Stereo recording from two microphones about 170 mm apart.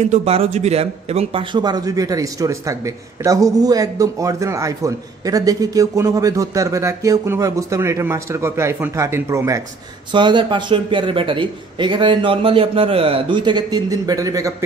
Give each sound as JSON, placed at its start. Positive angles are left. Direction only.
{"t": 0.0, "sound": "a man's voice", "side_deg": -40}
{"t": 10.1, "sound": "a man's voice", "side_deg": -25}